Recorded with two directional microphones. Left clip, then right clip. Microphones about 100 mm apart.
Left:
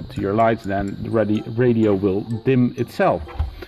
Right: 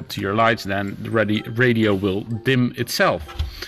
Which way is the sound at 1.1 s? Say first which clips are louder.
Even; 15° right (ahead or behind).